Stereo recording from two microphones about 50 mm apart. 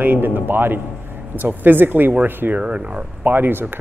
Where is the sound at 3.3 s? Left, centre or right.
Right.